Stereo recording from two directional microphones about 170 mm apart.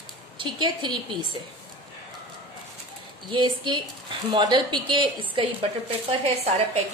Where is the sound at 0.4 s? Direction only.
30° right (ahead or behind).